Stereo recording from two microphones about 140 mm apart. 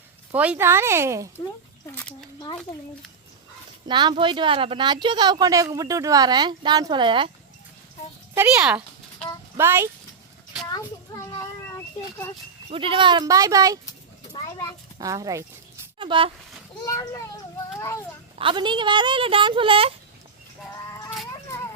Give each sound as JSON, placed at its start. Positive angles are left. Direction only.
{"t": 0.3, "sound": "speech", "side_deg": -10}
{"t": 1.9, "sound": "speech", "side_deg": 15}
{"t": 3.8, "sound": "speech", "side_deg": -35}
{"t": 9.6, "sound": "speech", "side_deg": -15}
{"t": 11.1, "sound": "a child's voice", "side_deg": 20}
{"t": 12.7, "sound": "speech", "side_deg": -40}
{"t": 14.9, "sound": "speech", "side_deg": -25}
{"t": 16.0, "sound": "speech", "side_deg": -35}
{"t": 16.8, "sound": "a child's voice", "side_deg": 25}
{"t": 18.3, "sound": "speech", "side_deg": -35}